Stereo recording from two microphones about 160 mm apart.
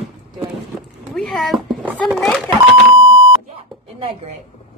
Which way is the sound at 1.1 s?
Centre (ahead or behind).